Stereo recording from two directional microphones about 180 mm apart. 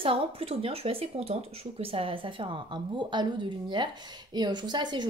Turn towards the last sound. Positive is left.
turn(degrees=-25)  # may be behind; listen again after turning